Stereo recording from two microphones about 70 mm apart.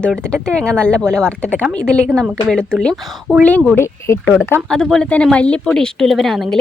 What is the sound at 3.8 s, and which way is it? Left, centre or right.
Speech, left.